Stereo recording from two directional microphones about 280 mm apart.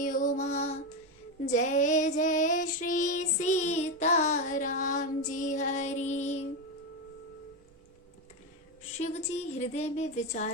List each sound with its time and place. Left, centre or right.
0.0 s music: left
1.5 s child singing: left
9.0 s speech: left